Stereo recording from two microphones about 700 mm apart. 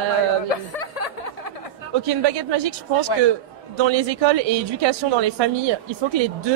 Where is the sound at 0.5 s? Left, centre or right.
Left.